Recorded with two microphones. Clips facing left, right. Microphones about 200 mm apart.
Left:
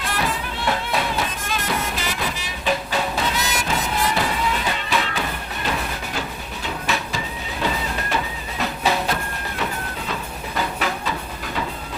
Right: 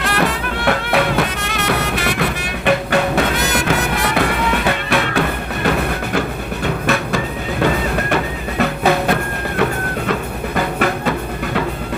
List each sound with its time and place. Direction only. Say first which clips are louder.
0.0 s music: right 7 dB; 75° right (ahead or behind)
6.8 s train: right 7 dB; 60° right (ahead or behind)
7.6 s music: right 7 dB; 60° right (ahead or behind)
10.1 s train: right 9 dB; 60° right (ahead or behind)